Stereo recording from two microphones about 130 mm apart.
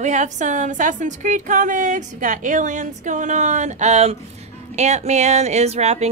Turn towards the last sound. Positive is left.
turn(degrees=-55)  # may be behind; listen again after turning